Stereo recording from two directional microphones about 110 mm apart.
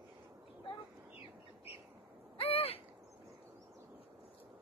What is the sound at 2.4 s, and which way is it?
Owl, 60° left (ahead or behind).